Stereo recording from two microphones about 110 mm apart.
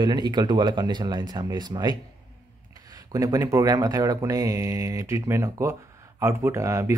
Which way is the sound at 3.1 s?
35° right (ahead or behind).